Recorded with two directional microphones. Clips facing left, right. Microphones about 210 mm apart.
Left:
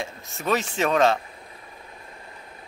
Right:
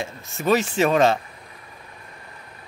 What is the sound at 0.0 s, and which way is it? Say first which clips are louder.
Speech: right 4 dB; 5° right (ahead or behind).